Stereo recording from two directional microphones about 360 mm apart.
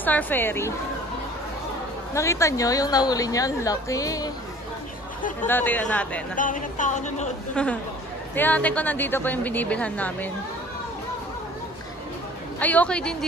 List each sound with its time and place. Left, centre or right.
0.0 s a woman's voice: centre
2.1 s a woman's voice: centre
5.5 s a woman's voice: centre
6.3 s speech: left
7.6 s a woman's voice: centre
12.5 s a woman's voice: centre